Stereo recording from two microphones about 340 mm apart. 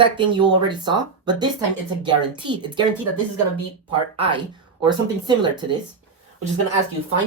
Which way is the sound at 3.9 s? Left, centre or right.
Centre.